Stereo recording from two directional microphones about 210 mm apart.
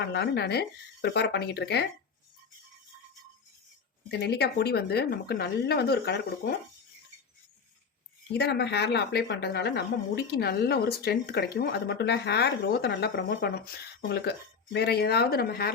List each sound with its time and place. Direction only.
0.1 s speech: 50° left (ahead or behind)
4.1 s speech: 50° left (ahead or behind)
8.3 s speech: 50° left (ahead or behind)